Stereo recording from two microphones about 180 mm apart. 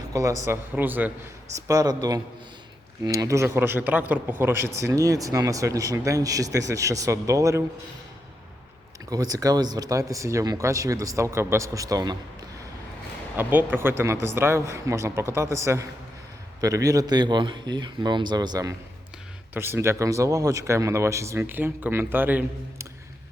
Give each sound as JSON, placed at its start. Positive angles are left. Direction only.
{"t": 0.1, "sound": "speech", "side_deg": -20}
{"t": 9.0, "sound": "speech", "side_deg": -20}